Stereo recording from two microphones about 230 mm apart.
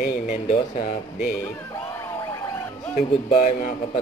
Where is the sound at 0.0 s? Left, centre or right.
Left.